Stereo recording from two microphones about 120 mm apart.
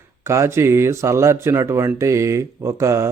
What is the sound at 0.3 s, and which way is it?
Speech, 20° right (ahead or behind).